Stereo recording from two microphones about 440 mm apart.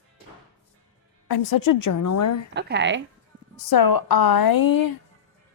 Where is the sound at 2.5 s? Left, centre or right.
Right.